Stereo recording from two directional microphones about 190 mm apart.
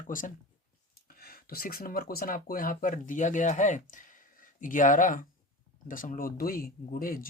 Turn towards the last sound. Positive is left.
turn(degrees=50)  # may be behind; listen again after turning